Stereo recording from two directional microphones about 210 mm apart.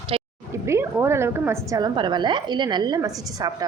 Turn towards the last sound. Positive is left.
turn(degrees=-20)  # may be behind; listen again after turning